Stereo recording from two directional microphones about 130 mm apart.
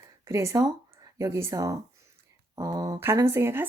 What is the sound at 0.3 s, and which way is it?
Speech, 20° right (ahead or behind).